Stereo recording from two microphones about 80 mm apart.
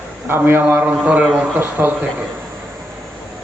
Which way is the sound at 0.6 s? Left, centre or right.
Centre.